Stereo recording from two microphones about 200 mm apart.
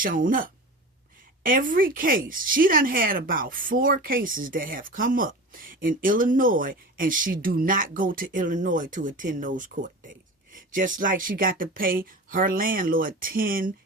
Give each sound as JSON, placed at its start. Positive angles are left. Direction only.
{"t": 0.0, "sound": "speech", "side_deg": -45}